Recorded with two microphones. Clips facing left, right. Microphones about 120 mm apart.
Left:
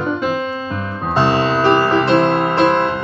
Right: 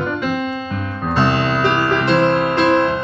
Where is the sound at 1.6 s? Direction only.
35° left (ahead or behind).